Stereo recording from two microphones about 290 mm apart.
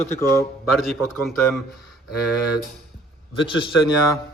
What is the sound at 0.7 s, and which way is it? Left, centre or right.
Speech, centre.